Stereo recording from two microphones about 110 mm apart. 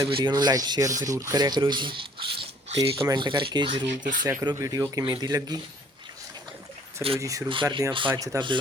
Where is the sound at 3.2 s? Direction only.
45° right (ahead or behind).